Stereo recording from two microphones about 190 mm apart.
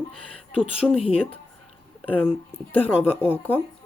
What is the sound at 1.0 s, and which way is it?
Speech, 30° left (ahead or behind).